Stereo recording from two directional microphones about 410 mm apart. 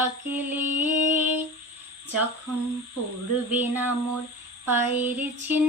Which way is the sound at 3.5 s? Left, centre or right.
Centre.